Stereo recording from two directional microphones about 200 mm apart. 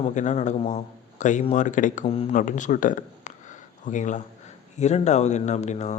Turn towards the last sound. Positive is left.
turn(degrees=35)  # may be behind; listen again after turning